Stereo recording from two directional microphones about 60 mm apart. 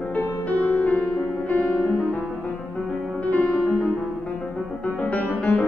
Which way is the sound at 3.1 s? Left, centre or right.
Left.